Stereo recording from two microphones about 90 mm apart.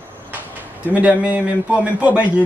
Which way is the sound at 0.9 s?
15° right (ahead or behind).